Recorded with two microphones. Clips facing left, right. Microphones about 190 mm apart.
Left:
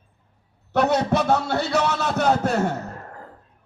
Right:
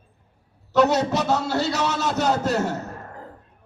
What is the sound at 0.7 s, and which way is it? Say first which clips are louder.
A man's voice: right 1 dB; 55° left (ahead or behind).